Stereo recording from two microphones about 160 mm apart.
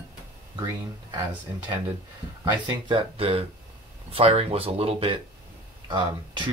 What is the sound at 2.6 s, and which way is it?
Speech, 30° right (ahead or behind).